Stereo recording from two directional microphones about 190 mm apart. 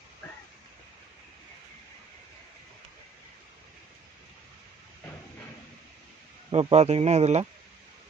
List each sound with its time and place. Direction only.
6.5 s speech: 35° right (ahead or behind)